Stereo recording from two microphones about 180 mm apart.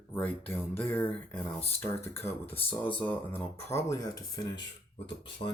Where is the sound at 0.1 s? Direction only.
10° left (ahead or behind).